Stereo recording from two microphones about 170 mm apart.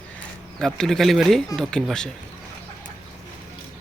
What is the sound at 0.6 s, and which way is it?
Speech, centre (ahead or behind).